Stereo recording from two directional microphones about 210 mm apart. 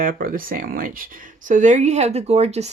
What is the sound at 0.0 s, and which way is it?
Speech, 45° right (ahead or behind).